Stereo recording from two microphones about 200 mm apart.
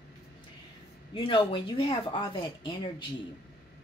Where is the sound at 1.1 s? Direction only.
25° left (ahead or behind).